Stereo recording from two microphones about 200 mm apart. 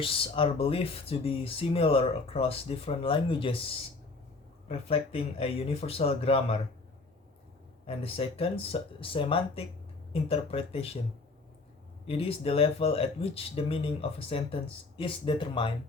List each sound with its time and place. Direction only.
0.0 s speech: 25° left (ahead or behind)
4.9 s speech: 30° left (ahead or behind)
7.9 s speech: 30° left (ahead or behind)
12.0 s speech: 30° left (ahead or behind)